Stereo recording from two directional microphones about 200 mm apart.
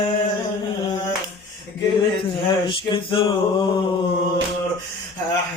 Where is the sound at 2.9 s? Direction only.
25° left (ahead or behind).